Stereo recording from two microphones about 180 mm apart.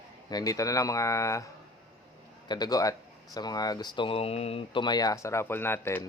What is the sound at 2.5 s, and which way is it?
Speech, 20° left (ahead or behind).